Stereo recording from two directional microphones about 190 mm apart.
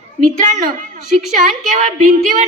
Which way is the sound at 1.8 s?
45° right (ahead or behind).